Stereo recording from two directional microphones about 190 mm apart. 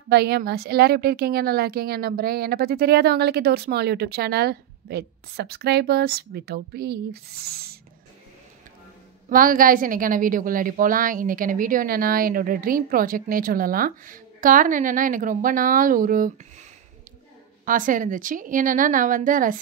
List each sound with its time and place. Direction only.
0.1 s a woman's voice: 60° right (ahead or behind)
9.3 s a woman's voice: 45° right (ahead or behind)
17.6 s a woman's voice: 45° right (ahead or behind)